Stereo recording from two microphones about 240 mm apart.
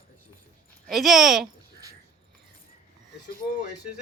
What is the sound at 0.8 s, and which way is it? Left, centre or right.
Speech, centre.